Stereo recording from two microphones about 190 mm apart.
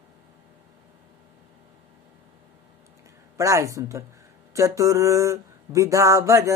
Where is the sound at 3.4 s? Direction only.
15° right (ahead or behind).